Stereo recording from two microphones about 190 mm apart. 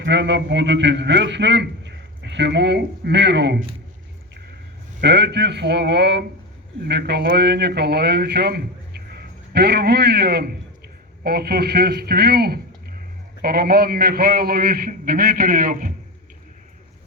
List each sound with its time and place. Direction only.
0.0 s a man's voice: 65° right (ahead or behind)
4.9 s a man's voice: 65° right (ahead or behind); by 15.9 s 50° right (ahead or behind)